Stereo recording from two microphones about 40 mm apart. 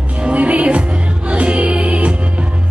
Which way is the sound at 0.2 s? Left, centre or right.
Right.